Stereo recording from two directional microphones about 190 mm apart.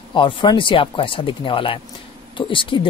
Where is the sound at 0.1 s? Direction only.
25° left (ahead or behind).